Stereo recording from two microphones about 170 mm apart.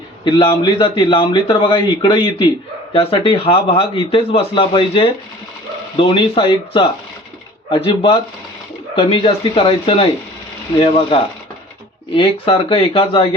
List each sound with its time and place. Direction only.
0.3 s a man's voice: 25° left (ahead or behind)